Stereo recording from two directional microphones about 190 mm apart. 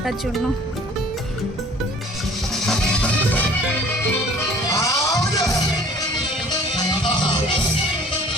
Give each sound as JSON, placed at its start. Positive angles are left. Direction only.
{"t": 2.6, "sound": "music", "side_deg": 5}
{"t": 4.7, "sound": "music", "side_deg": 15}
{"t": 6.7, "sound": "music", "side_deg": 25}